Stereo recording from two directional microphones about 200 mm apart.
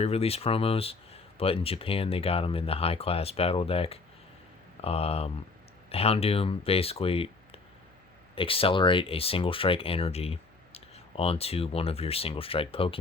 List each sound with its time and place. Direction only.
0.0 s speech: 30° left (ahead or behind)